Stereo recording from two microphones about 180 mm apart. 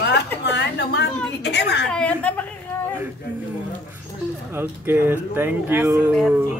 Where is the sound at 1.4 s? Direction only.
70° left (ahead or behind).